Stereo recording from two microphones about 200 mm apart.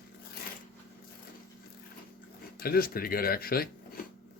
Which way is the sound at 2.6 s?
50° left (ahead or behind).